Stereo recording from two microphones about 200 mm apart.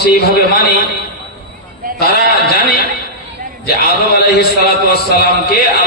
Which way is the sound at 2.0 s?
55° left (ahead or behind).